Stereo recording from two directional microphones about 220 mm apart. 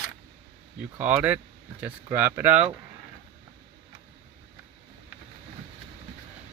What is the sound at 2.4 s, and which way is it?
Speech, 30° right (ahead or behind).